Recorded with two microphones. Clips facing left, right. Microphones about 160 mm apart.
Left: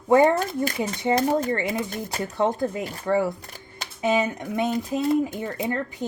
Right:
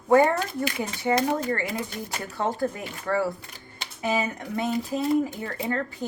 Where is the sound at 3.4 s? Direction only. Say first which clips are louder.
Left 2 dB; 45° left (ahead or behind).